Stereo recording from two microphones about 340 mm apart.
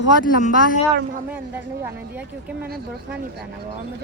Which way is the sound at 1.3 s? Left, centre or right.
Centre.